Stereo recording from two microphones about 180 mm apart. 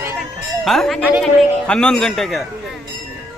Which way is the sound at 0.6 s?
Centre (ahead or behind).